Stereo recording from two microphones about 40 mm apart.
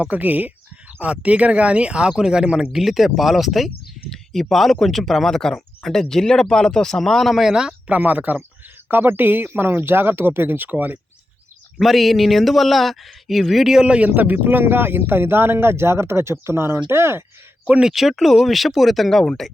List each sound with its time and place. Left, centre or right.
0.1 s speech: right
1.0 s speech: right
2.6 s speech: centre
4.1 s speech: centre
8.0 s speech: right
8.9 s speech: right
9.5 s speech: right
11.8 s speech: centre
13.8 s speech: right
14.2 s speech: right
17.8 s speech: centre